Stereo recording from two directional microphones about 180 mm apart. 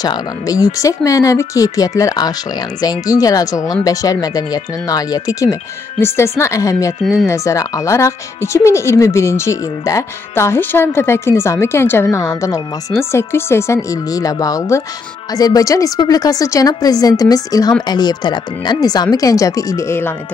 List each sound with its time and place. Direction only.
0.0 s speech: 20° left (ahead or behind)